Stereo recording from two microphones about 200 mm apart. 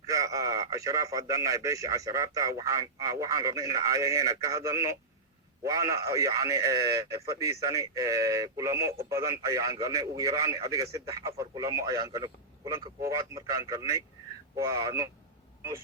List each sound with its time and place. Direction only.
0.0 s a man's voice: 15° right (ahead or behind)